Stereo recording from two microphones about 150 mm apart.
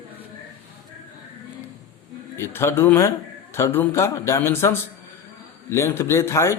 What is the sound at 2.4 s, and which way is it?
Speech, 15° left (ahead or behind).